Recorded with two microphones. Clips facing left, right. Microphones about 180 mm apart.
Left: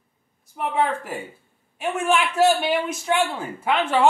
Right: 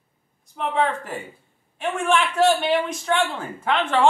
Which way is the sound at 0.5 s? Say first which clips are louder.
Even; 10° left (ahead or behind).